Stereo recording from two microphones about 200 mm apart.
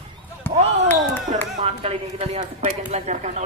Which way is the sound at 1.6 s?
30° right (ahead or behind).